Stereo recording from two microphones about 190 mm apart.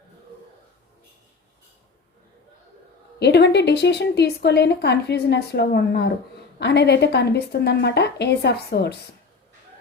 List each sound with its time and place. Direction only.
3.2 s a woman's voice: 60° left (ahead or behind)